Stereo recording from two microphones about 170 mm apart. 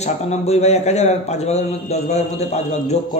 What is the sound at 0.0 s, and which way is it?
A man's voice, 40° left (ahead or behind).